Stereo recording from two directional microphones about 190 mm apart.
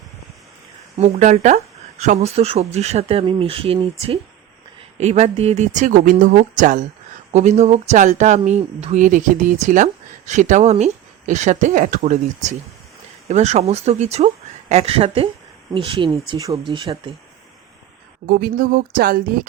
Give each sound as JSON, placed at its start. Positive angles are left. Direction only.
{"t": 0.9, "sound": "speech", "side_deg": -35}
{"t": 4.9, "sound": "speech", "side_deg": -35}
{"t": 18.3, "sound": "speech", "side_deg": -50}